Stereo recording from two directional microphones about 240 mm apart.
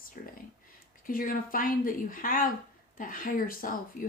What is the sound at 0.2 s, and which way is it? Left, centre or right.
Speech, left.